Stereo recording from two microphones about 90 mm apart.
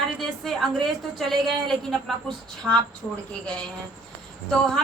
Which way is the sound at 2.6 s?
20° right (ahead or behind).